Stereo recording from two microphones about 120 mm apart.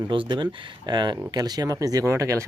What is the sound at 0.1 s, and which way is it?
Speech, 45° right (ahead or behind).